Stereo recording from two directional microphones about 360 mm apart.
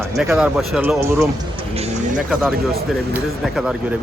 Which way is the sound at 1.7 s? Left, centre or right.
Centre.